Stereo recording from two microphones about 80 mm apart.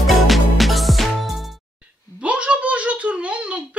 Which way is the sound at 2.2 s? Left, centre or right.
Centre.